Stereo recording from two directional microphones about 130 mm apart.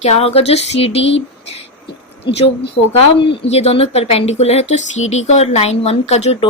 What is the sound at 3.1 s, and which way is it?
Speech, 45° left (ahead or behind).